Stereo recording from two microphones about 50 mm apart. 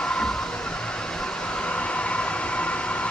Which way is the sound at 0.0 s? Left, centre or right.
Centre.